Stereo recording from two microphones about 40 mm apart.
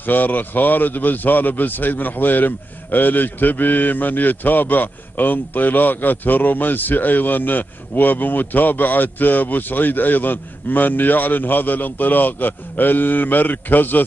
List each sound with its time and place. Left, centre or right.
0.0 s a man's voice: left